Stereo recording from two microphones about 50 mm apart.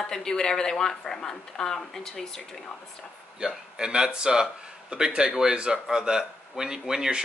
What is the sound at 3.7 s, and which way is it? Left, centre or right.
Speech, centre.